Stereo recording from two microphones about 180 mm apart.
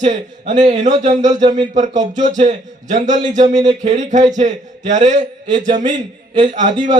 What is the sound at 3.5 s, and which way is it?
Speech, 20° right (ahead or behind).